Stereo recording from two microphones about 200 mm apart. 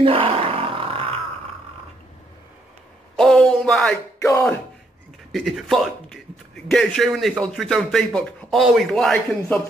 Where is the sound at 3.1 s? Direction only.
5° left (ahead or behind).